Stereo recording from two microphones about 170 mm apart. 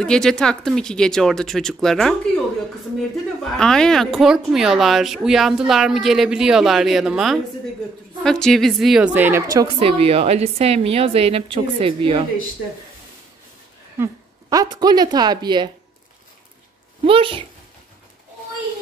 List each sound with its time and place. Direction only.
0.0 s a woman's voice: 5° left (ahead or behind)
3.5 s a woman's voice: 5° left (ahead or behind)
9.8 s a woman's voice: 35° right (ahead or behind)
13.9 s speech: 20° right (ahead or behind)
17.0 s a woman's voice: 30° right (ahead or behind)